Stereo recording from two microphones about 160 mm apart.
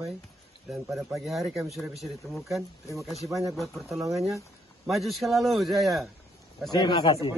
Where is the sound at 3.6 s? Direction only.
Centre (ahead or behind).